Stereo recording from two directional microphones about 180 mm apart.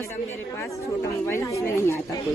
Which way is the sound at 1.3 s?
15° left (ahead or behind).